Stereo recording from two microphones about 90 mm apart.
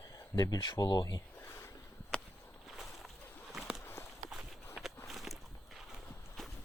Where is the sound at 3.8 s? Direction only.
25° left (ahead or behind).